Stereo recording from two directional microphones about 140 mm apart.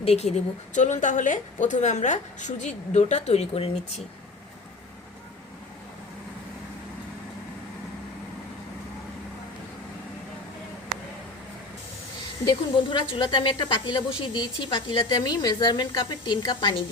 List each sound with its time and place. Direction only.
0.0 s a woman's voice: 50° left (ahead or behind)
12.5 s speech: 35° left (ahead or behind)